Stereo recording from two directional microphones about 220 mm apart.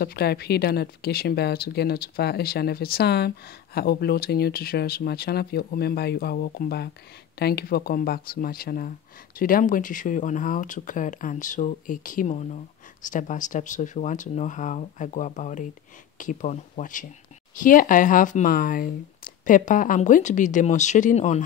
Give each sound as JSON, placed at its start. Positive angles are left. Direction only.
{"t": 0.0, "sound": "speech", "side_deg": 45}